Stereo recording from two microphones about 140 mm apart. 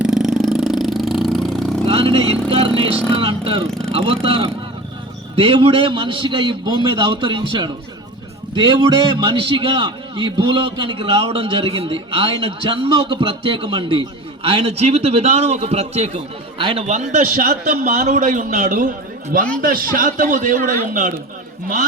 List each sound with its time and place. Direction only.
0.0 s a sound: 5° right (ahead or behind)
1.9 s vehicle: 40° right (ahead or behind)
3.7 s speech: 5° left (ahead or behind)
3.9 s a man's voice: 45° right (ahead or behind)
16.8 s a man's voice: 60° right (ahead or behind)